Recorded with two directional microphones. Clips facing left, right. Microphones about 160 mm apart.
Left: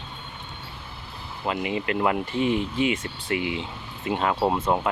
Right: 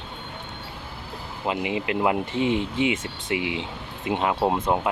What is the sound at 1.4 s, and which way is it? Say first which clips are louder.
Speech: right 1 dB; 20° right (ahead or behind).